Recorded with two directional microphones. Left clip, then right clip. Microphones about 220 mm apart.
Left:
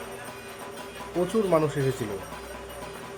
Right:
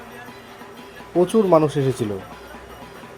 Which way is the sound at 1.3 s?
20° right (ahead or behind).